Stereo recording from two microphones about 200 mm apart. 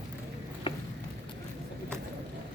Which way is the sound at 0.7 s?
25° left (ahead or behind).